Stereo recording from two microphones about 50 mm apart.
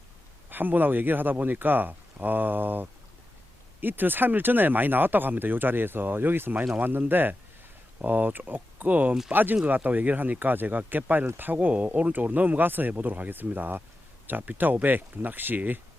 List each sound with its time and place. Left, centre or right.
0.5 s speech: right